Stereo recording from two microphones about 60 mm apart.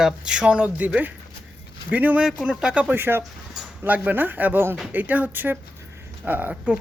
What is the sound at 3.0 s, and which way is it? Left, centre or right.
Speech, right.